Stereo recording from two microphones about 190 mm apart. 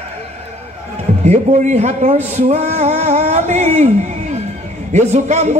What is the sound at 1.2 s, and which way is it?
Speech, 35° right (ahead or behind).